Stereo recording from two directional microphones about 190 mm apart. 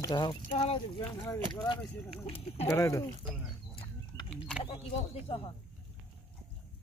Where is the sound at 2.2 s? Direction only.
30° left (ahead or behind).